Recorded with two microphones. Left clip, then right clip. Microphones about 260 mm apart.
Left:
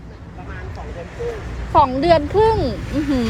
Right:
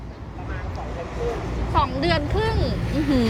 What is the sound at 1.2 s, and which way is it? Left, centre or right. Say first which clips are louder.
Vehicle: left 1 dB; right.